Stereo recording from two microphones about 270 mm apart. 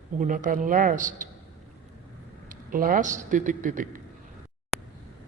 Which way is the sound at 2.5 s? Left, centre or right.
Right.